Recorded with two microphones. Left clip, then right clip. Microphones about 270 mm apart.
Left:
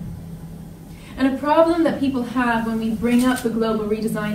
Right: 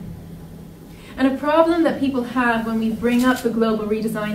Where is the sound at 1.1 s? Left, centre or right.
Centre.